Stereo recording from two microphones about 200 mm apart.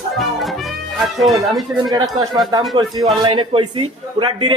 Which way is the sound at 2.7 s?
20° right (ahead or behind).